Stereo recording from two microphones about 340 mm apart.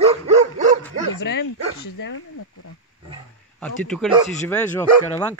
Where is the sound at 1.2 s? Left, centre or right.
Left.